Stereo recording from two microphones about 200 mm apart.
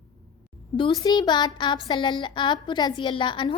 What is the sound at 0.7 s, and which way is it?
A woman's voice, 20° left (ahead or behind).